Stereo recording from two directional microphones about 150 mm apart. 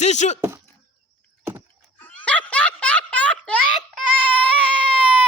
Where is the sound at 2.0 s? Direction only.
10° left (ahead or behind).